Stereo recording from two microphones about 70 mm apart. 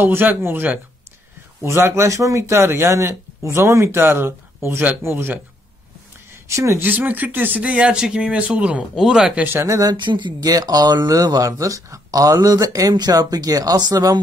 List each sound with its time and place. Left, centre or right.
0.0 s speech: right
6.4 s speech: right
6.8 s speech: right; by 9.4 s centre
9.4 s speech: right
9.7 s speech: right
12.9 s speech: right